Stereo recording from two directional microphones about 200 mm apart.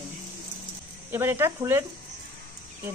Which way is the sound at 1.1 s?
10° right (ahead or behind).